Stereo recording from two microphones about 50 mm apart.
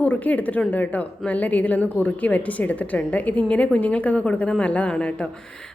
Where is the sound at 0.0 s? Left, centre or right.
Left.